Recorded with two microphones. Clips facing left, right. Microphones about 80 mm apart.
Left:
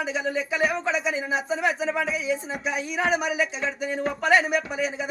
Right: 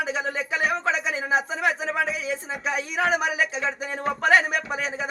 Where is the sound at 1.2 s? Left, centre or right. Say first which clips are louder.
Right 1 dB; right.